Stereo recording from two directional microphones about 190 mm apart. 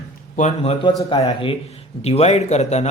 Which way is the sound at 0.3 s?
35° left (ahead or behind).